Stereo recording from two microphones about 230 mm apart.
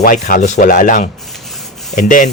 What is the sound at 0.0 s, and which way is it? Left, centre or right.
Speech, left.